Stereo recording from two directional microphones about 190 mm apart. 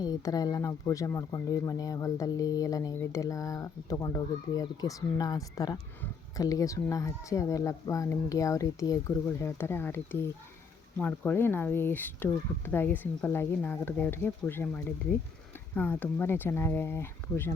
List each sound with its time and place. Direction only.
0.0 s speech: 20° left (ahead or behind)